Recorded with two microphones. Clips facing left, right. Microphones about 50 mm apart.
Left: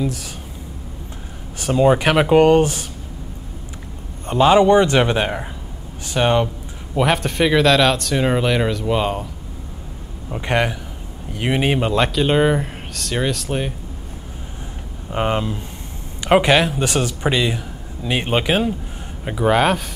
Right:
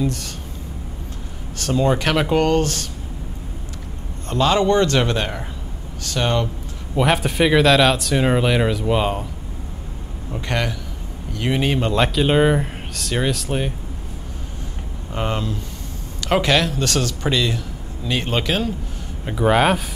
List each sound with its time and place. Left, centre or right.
0.0 s speech: centre
1.6 s speech: centre
4.3 s a man's voice: centre
7.0 s speech: centre
10.3 s a man's voice: left
11.9 s speech: centre
15.0 s a man's voice: left
19.3 s speech: centre